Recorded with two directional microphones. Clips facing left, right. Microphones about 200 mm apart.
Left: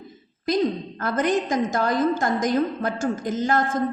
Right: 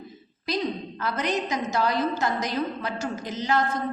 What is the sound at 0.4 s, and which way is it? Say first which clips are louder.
A woman's voice: left 6 dB; 50° left (ahead or behind).